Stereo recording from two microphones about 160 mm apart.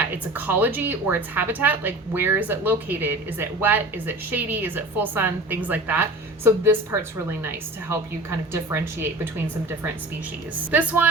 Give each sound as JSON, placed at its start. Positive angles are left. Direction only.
{"t": 0.3, "sound": "a woman's voice", "side_deg": -10}
{"t": 10.7, "sound": "a woman's voice", "side_deg": -10}